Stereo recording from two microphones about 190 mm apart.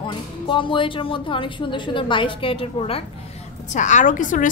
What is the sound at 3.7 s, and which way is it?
Speech, 40° left (ahead or behind).